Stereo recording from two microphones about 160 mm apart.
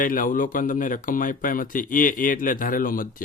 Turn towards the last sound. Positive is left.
turn(degrees=60)  # may be behind; listen again after turning